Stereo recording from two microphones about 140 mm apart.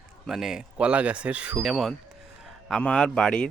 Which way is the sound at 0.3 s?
5° right (ahead or behind).